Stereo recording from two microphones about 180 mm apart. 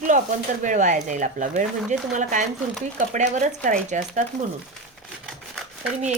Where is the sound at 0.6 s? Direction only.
45° right (ahead or behind).